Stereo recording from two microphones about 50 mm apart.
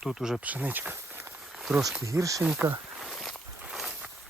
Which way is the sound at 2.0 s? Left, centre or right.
Right.